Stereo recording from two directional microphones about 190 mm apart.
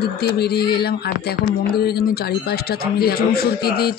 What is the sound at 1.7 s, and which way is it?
A man's voice, 55° left (ahead or behind).